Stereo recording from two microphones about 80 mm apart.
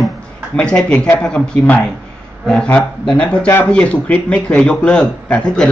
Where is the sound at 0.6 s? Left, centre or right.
Centre.